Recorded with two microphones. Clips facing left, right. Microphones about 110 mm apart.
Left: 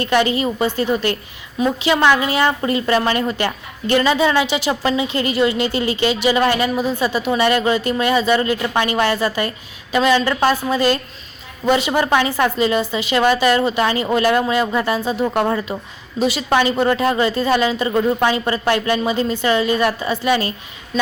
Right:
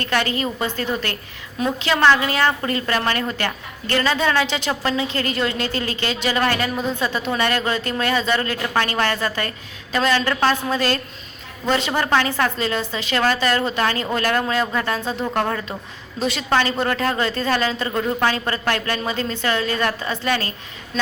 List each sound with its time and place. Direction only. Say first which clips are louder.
0.0 s a woman's voice: left 5 dB; 15° left (ahead or behind)